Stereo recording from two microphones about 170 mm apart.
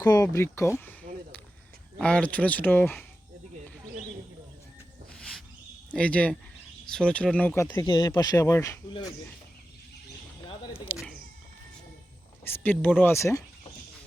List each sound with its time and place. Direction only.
0.0 s speech: 20° left (ahead or behind)
2.0 s speech: 5° left (ahead or behind)
5.9 s speech: 5° left (ahead or behind)
10.9 s speech: centre (ahead or behind)
12.5 s speech: 10° left (ahead or behind)